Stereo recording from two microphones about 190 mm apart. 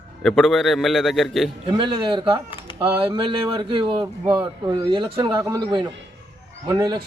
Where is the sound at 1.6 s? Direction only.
25° right (ahead or behind).